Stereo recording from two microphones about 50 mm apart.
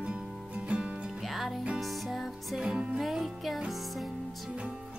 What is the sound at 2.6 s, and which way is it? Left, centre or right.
Music, right.